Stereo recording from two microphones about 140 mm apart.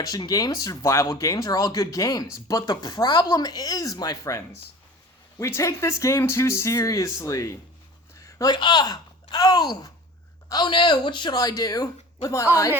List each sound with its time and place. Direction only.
0.0 s speech: 25° left (ahead or behind)